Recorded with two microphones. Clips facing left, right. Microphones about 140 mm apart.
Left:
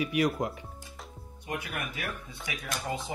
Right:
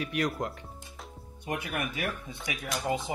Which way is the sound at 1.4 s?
25° right (ahead or behind).